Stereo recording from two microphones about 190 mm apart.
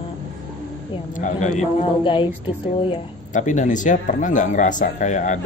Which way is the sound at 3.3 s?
40° left (ahead or behind).